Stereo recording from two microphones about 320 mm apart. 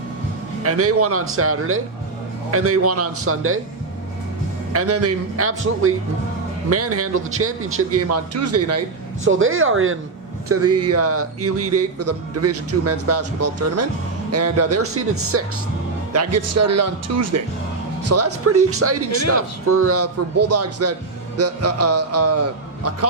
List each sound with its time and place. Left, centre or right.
0.6 s speech: right
4.7 s speech: right
9.2 s speech: right